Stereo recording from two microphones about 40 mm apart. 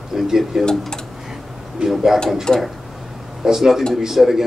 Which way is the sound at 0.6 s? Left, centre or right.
Centre.